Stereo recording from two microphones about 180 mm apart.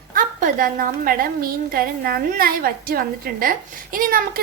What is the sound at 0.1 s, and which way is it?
A woman's voice, 45° right (ahead or behind).